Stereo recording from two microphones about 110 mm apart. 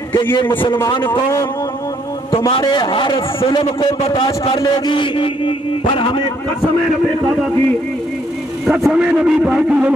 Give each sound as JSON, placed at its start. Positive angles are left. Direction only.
{"t": 2.6, "sound": "a man's voice", "side_deg": 45}
{"t": 8.6, "sound": "a man's voice", "side_deg": -5}